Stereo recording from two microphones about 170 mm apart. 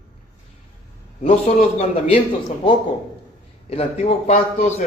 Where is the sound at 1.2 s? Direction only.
40° left (ahead or behind).